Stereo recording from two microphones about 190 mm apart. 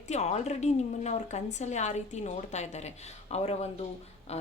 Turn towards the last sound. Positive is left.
turn(degrees=35)  # may be behind; listen again after turning